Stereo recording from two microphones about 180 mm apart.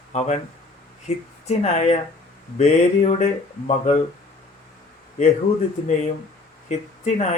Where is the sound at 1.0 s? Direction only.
40° left (ahead or behind).